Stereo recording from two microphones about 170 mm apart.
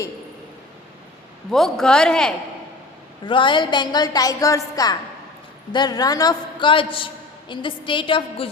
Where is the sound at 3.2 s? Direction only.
30° left (ahead or behind).